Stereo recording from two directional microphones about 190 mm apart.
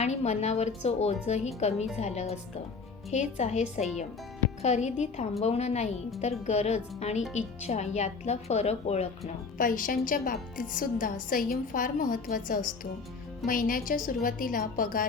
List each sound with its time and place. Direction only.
0.0 s speech: 35° left (ahead or behind)
4.6 s speech: 35° left (ahead or behind)
9.6 s a woman's voice: 45° left (ahead or behind)